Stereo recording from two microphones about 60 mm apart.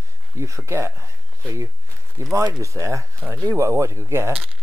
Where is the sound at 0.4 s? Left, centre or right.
Right.